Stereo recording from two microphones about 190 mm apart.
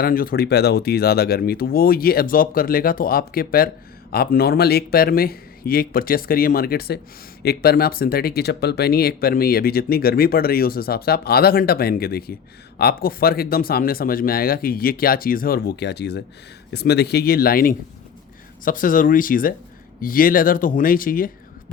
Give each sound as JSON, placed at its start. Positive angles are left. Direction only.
{"t": 0.0, "sound": "speech", "side_deg": 50}